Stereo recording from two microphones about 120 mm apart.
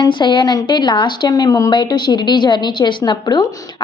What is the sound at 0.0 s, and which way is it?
A woman's voice, 40° left (ahead or behind).